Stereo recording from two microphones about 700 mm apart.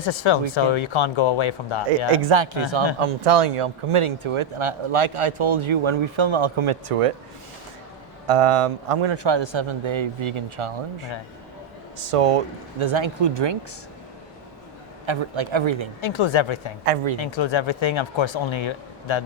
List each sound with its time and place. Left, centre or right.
0.0 s speech: left
2.3 s a man's voice: right
8.3 s speech: right
12.1 s speech: right
12.8 s a man's voice: right
15.0 s a man's voice: right
16.0 s speech: left
16.8 s speech: right
17.2 s speech: left